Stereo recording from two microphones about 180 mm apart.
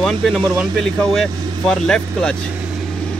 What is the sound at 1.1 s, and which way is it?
Speech, centre (ahead or behind).